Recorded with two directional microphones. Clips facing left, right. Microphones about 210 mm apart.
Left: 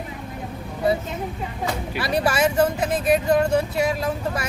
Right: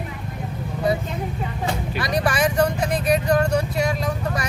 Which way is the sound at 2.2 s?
25° left (ahead or behind).